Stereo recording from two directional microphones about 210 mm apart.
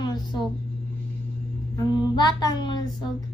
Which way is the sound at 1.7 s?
20° left (ahead or behind).